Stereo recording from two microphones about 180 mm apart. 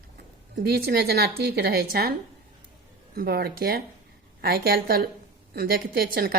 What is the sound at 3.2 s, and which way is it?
Speech, 60° right (ahead or behind).